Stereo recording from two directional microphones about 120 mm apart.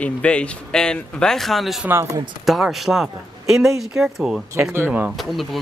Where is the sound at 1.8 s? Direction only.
20° right (ahead or behind).